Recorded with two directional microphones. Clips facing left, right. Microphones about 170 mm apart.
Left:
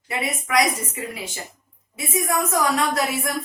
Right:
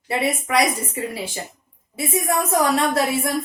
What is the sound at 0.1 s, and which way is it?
A woman's voice, 30° right (ahead or behind).